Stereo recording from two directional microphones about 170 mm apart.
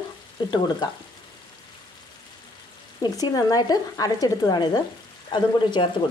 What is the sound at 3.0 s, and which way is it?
Speech, 20° left (ahead or behind).